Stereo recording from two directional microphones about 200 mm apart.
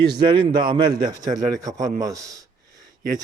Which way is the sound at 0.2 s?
20° right (ahead or behind).